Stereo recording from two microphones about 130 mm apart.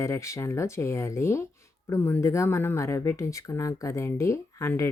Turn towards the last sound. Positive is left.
turn(degrees=20)  # may be behind; listen again after turning